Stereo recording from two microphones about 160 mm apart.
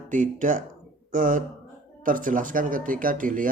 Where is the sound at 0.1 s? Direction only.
50° right (ahead or behind).